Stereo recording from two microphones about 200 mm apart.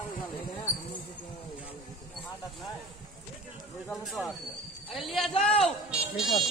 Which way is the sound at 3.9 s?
Centre (ahead or behind).